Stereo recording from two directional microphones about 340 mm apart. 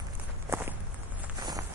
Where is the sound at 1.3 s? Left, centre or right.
Centre.